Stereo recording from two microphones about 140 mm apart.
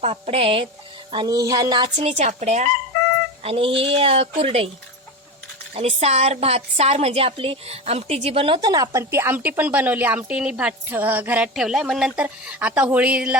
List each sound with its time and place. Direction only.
0.0 s speech: 45° right (ahead or behind)
1.1 s a sound: 30° right (ahead or behind)
2.0 s speech: 50° right (ahead or behind)
3.4 s speech: 40° right (ahead or behind)
5.7 s a woman's voice: 45° right (ahead or behind); by 13.3 s 10° right (ahead or behind)